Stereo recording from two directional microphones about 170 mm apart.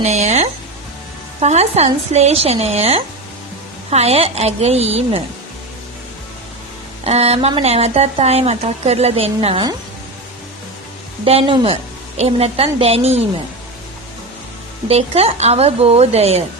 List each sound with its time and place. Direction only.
0.0 s speech: 40° right (ahead or behind)
7.0 s speech: 40° right (ahead or behind)
11.3 s speech: 30° right (ahead or behind)
14.8 s speech: 35° right (ahead or behind)